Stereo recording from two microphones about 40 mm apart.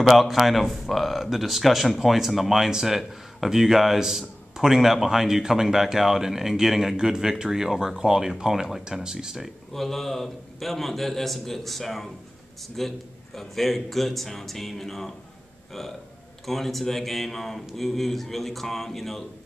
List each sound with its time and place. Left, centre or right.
0.0 s a man's voice: centre
9.7 s speech: centre
16.4 s speech: centre